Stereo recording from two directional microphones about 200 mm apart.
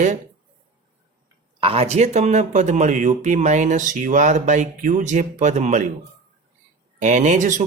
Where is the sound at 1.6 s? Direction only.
30° right (ahead or behind).